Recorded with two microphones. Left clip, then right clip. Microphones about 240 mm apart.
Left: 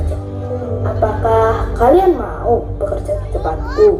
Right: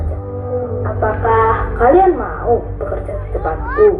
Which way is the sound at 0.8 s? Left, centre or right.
Left.